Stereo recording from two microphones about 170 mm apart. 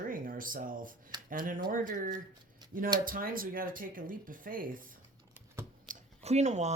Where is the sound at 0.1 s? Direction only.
55° right (ahead or behind).